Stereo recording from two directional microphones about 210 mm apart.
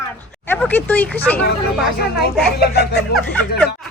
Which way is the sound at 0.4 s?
10° left (ahead or behind).